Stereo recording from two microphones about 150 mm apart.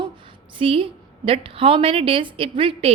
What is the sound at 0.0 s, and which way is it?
A woman's voice, 35° right (ahead or behind).